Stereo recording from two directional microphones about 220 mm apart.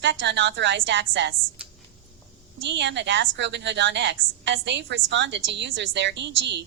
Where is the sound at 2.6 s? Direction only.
55° right (ahead or behind).